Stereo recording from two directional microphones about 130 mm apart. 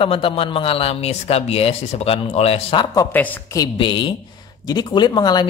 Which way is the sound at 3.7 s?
40° left (ahead or behind).